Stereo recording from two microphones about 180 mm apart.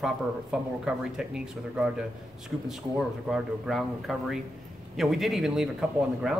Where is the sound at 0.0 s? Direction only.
5° right (ahead or behind).